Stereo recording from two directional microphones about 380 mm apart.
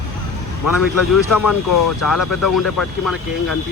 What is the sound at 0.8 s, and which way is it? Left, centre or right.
Speech, left.